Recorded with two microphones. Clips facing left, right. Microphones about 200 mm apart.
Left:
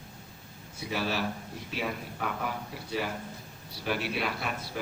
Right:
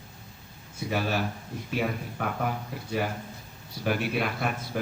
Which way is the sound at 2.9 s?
50° right (ahead or behind).